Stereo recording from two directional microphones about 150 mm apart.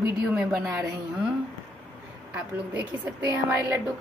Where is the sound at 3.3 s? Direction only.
10° right (ahead or behind).